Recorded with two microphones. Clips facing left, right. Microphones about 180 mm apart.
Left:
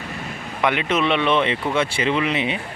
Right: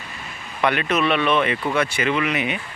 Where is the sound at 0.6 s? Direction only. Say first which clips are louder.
Even; 20° left (ahead or behind).